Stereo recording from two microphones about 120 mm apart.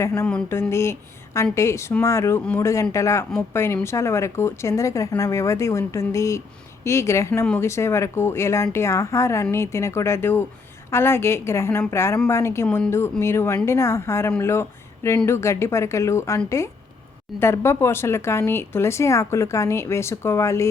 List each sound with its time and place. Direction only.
0.0 s speech: 25° left (ahead or behind)
17.4 s speech: 20° left (ahead or behind)